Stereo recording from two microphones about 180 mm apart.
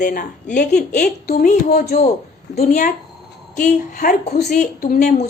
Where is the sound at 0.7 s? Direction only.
65° left (ahead or behind); by 5.2 s 45° left (ahead or behind).